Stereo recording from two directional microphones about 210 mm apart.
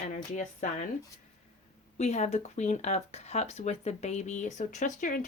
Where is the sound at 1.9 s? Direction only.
30° left (ahead or behind).